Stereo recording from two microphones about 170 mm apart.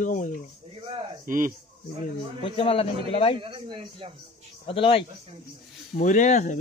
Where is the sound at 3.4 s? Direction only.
30° right (ahead or behind).